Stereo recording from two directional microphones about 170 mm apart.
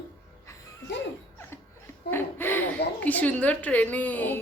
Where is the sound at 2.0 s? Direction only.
10° left (ahead or behind).